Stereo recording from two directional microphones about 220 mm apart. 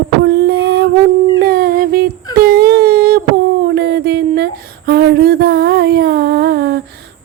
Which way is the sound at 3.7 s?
50° right (ahead or behind).